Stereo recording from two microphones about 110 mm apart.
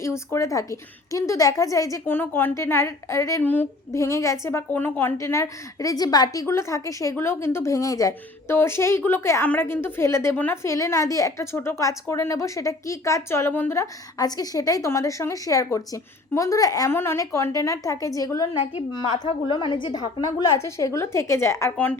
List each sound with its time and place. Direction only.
0.0 s a woman's voice: 25° left (ahead or behind)
2.0 s a woman's voice: 20° left (ahead or behind)
3.4 s a woman's voice: 15° left (ahead or behind)
14.2 s speech: 35° left (ahead or behind)
16.9 s a woman's voice: 20° left (ahead or behind); by 20.3 s 40° left (ahead or behind)
20.6 s a woman's voice: 25° left (ahead or behind)